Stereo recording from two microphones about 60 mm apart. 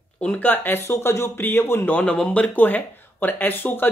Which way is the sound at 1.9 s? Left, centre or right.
Left.